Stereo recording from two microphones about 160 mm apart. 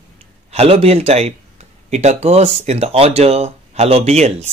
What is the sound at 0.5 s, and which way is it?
Speech, 40° right (ahead or behind).